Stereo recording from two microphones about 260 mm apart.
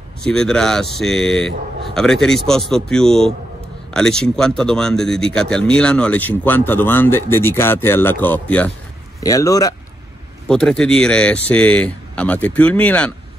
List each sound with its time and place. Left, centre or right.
0.2 s speech: centre
10.5 s speech: centre